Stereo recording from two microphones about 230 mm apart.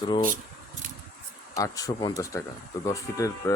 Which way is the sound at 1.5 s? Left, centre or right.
Centre.